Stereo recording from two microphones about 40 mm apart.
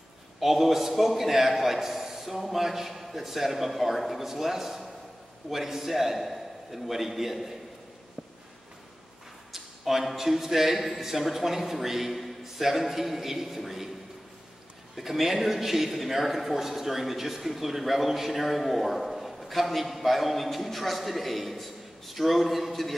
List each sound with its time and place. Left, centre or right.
0.4 s a man's voice: centre
9.5 s speech: centre
15.0 s a man's voice: centre